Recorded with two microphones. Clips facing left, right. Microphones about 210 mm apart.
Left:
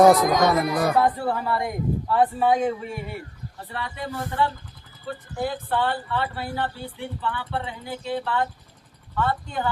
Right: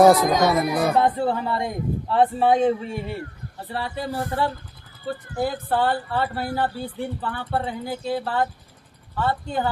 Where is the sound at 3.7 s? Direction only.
35° right (ahead or behind).